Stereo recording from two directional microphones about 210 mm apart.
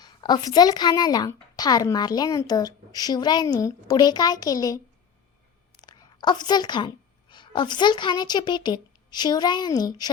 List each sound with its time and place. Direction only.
0.0 s a woman's voice: 20° left (ahead or behind)
5.8 s a woman's voice: 20° left (ahead or behind)